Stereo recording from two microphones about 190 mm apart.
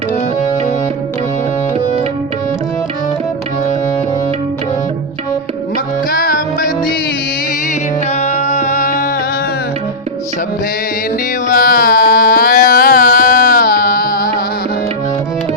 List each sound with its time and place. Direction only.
6.1 s music: 50° left (ahead or behind)
8.1 s music: 35° left (ahead or behind)
11.4 s a sound: 50° left (ahead or behind)